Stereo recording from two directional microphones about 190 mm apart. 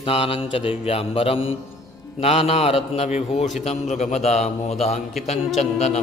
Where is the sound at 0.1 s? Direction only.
30° left (ahead or behind).